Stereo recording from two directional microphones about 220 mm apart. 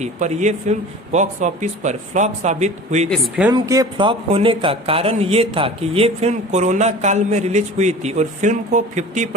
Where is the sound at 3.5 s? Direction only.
15° right (ahead or behind).